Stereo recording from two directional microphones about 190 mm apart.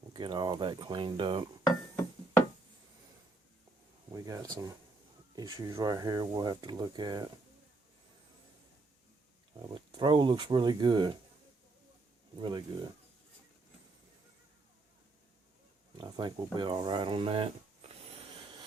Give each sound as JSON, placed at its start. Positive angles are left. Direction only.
{"t": 0.1, "sound": "speech", "side_deg": -25}
{"t": 4.1, "sound": "speech", "side_deg": -20}
{"t": 9.6, "sound": "speech", "side_deg": -25}
{"t": 12.4, "sound": "speech", "side_deg": -25}
{"t": 16.0, "sound": "speech", "side_deg": -25}